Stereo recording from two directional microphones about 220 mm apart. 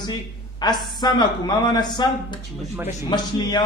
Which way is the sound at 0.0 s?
20° left (ahead or behind).